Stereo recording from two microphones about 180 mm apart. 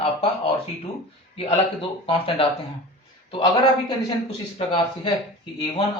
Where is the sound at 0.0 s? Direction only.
30° left (ahead or behind).